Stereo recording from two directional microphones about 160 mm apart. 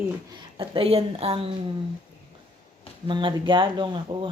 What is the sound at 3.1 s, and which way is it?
Speech, 30° right (ahead or behind).